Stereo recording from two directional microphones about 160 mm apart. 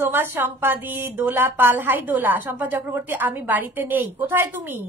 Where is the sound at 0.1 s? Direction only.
15° right (ahead or behind).